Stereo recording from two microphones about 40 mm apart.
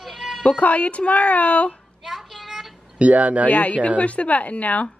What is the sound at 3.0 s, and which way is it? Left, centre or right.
Speech, right.